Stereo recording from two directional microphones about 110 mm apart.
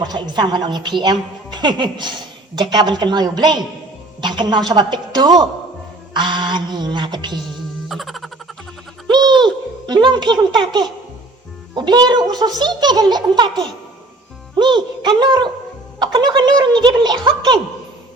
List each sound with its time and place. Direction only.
0.0 s a woman's voice: 40° right (ahead or behind)
7.9 s music: centre (ahead or behind)
9.0 s a sound: 40° right (ahead or behind)
11.7 s a child's voice: 40° right (ahead or behind)